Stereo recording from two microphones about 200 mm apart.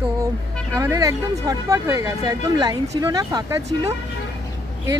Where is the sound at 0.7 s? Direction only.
15° right (ahead or behind).